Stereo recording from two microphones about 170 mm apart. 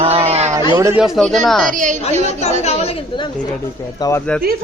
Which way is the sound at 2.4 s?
40° left (ahead or behind).